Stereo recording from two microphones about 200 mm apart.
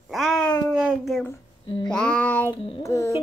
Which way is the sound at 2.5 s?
30° left (ahead or behind).